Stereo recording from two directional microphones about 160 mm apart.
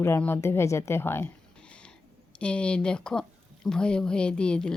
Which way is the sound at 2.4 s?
5° left (ahead or behind).